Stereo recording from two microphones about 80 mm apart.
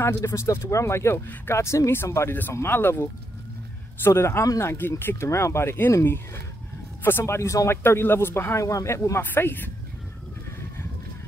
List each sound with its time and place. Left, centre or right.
0.0 s speech: left
9.2 s speech: left